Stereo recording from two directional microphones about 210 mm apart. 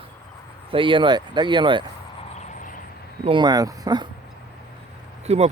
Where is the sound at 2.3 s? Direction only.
35° left (ahead or behind).